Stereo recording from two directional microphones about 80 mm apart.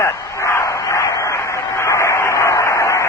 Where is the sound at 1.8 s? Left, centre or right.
Left.